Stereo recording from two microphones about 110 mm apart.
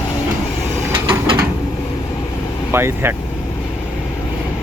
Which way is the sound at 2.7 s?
20° right (ahead or behind).